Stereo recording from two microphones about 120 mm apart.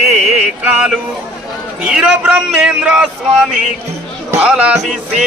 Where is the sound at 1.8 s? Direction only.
5° right (ahead or behind).